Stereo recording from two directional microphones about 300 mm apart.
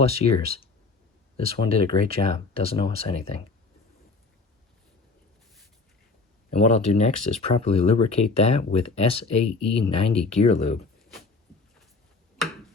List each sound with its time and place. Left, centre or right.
0.0 s speech: centre
1.4 s speech: centre
6.5 s speech: left